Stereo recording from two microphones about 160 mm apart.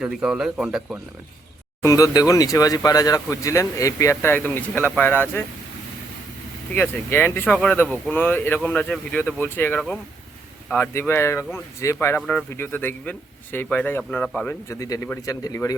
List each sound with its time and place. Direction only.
0.0 s a man's voice: 5° right (ahead or behind)
1.8 s speech: 20° left (ahead or behind)
6.7 s speech: 10° left (ahead or behind)
14.7 s speech: 20° left (ahead or behind)